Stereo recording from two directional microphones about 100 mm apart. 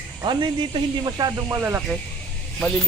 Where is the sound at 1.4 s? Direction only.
25° right (ahead or behind).